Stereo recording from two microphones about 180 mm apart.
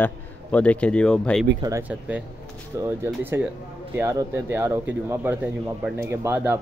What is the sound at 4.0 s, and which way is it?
Speech, 15° right (ahead or behind).